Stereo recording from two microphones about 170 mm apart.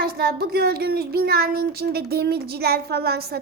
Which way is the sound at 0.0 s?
70° right (ahead or behind).